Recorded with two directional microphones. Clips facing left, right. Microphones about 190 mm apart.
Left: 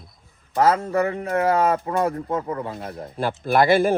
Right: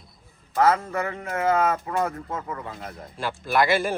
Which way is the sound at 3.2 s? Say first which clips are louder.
Left 4 dB; 55° left (ahead or behind).